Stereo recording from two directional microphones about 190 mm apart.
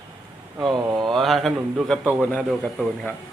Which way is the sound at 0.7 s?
20° right (ahead or behind).